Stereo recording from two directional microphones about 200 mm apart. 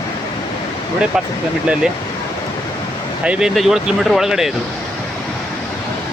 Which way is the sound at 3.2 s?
5° right (ahead or behind).